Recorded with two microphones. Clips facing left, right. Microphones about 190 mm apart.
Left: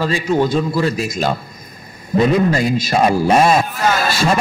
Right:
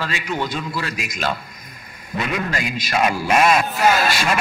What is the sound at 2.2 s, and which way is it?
A man's voice, 35° left (ahead or behind).